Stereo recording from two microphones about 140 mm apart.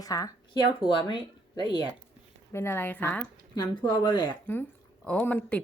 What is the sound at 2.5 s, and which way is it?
Speech, 15° left (ahead or behind).